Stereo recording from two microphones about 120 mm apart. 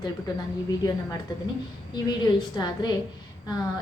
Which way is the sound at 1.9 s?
40° left (ahead or behind).